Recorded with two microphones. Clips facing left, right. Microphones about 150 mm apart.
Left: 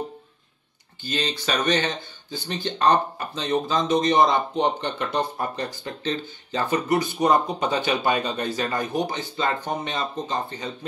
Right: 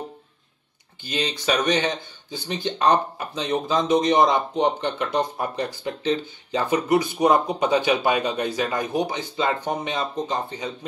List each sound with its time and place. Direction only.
1.1 s speech: 5° right (ahead or behind)
5.9 s speech: 15° right (ahead or behind)
7.2 s speech: 5° right (ahead or behind)